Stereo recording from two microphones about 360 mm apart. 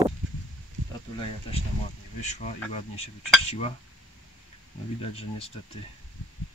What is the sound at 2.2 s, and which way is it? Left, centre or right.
Insect, centre.